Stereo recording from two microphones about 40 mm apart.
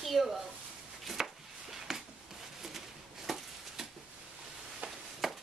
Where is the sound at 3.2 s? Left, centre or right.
Centre.